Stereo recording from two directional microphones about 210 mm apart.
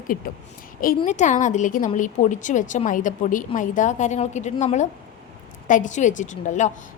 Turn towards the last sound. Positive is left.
turn(degrees=35)  # may be behind; listen again after turning